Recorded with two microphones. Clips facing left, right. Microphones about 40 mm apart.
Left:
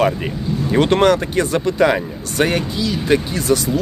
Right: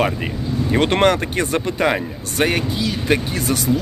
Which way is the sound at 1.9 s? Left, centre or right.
Centre.